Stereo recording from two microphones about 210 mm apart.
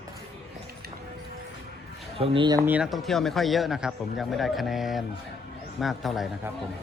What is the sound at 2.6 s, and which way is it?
A man's voice, 5° right (ahead or behind).